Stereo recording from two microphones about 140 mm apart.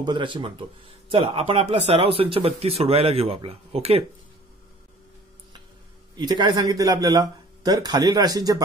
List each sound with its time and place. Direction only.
0.0 s speech: 35° right (ahead or behind)
6.1 s speech: 35° right (ahead or behind)